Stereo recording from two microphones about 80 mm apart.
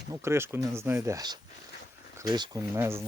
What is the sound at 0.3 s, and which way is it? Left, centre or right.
Speech, right.